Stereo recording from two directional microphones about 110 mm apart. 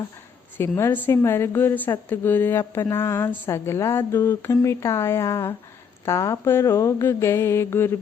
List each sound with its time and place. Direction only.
0.5 s a woman's voice: 20° left (ahead or behind)